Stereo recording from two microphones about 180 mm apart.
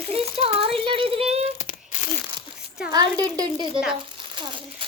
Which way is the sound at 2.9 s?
20° right (ahead or behind).